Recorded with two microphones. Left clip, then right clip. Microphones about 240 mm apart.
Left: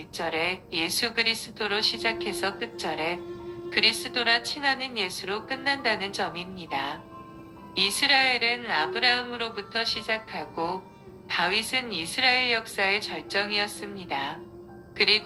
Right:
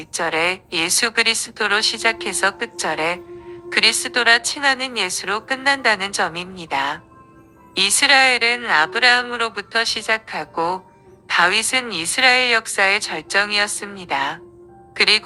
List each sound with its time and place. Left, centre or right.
0.1 s a woman's voice: right